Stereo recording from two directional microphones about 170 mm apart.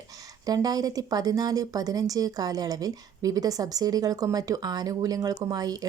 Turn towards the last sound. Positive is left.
turn(degrees=-20)  # may be behind; listen again after turning